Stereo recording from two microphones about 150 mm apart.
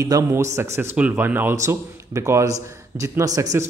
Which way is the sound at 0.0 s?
20° right (ahead or behind).